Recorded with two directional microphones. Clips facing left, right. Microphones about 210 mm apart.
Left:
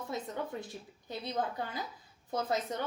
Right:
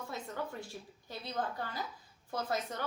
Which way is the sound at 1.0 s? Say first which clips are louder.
Left 3 dB; 20° left (ahead or behind).